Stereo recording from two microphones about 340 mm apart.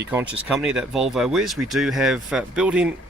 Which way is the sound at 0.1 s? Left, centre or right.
Centre.